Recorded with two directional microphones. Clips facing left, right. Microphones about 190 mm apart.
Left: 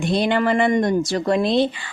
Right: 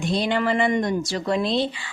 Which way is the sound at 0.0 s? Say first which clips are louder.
Left 3 dB; 55° left (ahead or behind).